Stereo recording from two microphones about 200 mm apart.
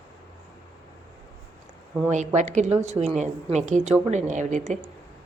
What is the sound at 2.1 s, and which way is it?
A woman's voice, 35° right (ahead or behind).